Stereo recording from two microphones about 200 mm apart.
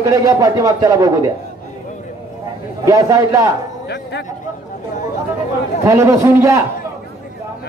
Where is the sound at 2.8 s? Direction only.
15° right (ahead or behind).